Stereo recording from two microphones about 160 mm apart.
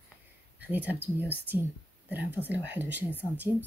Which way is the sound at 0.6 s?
10° right (ahead or behind).